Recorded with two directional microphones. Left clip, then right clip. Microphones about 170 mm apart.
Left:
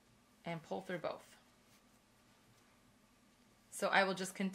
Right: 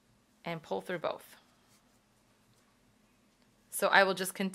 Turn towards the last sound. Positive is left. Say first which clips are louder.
# right 7 dB
turn(degrees=-25)  # may be behind; listen again after turning